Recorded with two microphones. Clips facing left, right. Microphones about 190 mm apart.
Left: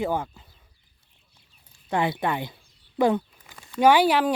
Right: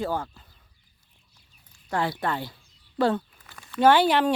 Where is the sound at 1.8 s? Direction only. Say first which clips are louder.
Left 2 dB; 20° left (ahead or behind).